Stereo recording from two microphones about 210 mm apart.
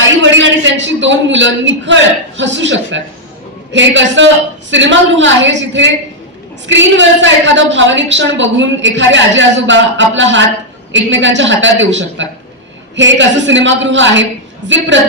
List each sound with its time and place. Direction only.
0.0 s a man's voice: 60° right (ahead or behind)